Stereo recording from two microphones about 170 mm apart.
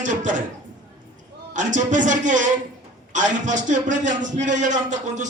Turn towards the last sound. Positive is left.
turn(degrees=-45)  # may be behind; listen again after turning